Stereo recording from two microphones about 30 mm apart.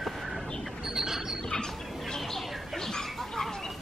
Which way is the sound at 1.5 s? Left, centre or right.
Left.